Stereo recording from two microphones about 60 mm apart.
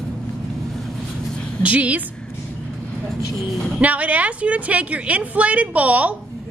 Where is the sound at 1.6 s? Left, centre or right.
Right.